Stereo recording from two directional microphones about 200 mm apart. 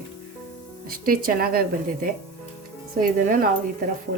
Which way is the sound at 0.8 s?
45° right (ahead or behind).